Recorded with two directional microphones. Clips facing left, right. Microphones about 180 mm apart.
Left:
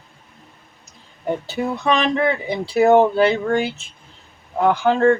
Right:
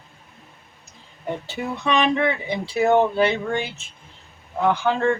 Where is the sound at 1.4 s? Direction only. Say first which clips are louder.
Left 4 dB; 35° left (ahead or behind).